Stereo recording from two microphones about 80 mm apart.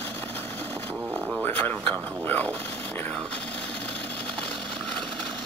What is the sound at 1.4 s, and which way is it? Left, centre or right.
Speech, left.